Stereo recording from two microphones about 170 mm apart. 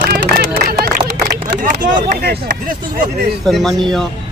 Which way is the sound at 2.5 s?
55° right (ahead or behind).